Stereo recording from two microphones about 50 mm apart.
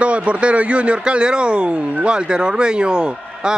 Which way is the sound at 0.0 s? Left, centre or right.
Right.